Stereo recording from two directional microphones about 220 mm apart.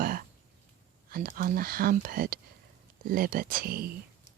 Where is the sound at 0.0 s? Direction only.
40° right (ahead or behind).